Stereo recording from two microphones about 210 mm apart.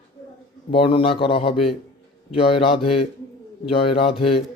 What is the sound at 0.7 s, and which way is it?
Speech, 25° left (ahead or behind).